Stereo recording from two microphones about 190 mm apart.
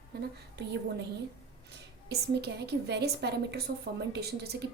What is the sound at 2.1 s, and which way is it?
A woman's voice, 60° right (ahead or behind).